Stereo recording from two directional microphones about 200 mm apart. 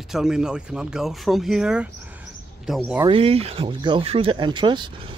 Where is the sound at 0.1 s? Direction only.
5° right (ahead or behind).